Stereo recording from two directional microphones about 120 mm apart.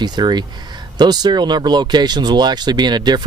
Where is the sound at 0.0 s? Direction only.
35° right (ahead or behind).